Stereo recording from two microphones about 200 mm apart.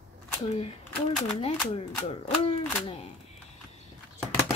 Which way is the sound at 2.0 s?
30° left (ahead or behind).